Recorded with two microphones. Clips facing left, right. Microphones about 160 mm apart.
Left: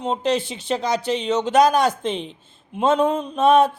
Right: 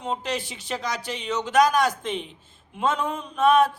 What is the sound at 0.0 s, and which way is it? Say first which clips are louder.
Speech: left 7 dB; 25° left (ahead or behind).